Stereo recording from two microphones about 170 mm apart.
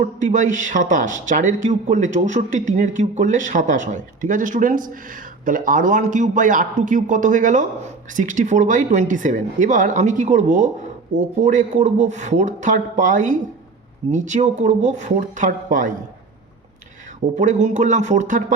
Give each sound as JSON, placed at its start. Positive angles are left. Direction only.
{"t": 0.0, "sound": "speech", "side_deg": -45}
{"t": 17.3, "sound": "speech", "side_deg": -45}